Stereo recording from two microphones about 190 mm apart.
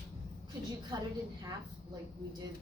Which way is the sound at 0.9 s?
20° right (ahead or behind).